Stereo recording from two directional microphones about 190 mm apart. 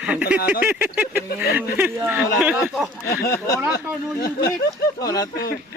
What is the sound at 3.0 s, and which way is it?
Speech, 15° left (ahead or behind).